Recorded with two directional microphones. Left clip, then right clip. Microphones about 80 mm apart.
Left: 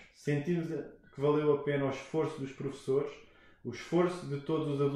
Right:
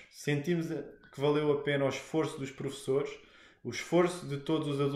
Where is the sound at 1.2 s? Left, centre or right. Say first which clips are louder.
Even; right.